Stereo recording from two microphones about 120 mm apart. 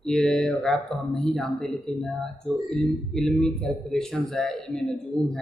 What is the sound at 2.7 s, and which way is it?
A man's voice, centre (ahead or behind).